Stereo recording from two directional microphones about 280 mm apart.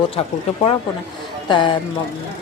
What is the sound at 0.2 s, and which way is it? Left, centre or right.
Speech, centre.